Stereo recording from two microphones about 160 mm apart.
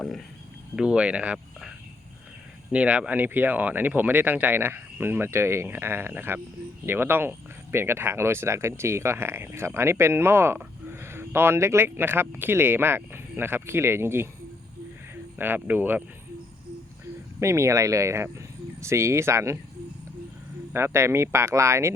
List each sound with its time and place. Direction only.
0.8 s speech: 5° right (ahead or behind)
2.7 s speech: 10° right (ahead or behind)
17.4 s speech: 15° right (ahead or behind)
20.7 s speech: 15° right (ahead or behind)